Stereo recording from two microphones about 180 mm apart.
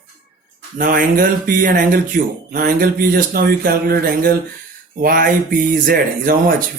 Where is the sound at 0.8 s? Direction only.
50° right (ahead or behind).